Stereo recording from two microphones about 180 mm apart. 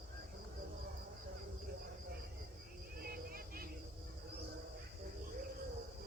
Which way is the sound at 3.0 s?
55° right (ahead or behind).